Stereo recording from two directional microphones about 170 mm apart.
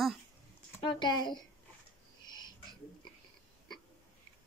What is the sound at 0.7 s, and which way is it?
Speech, 30° left (ahead or behind).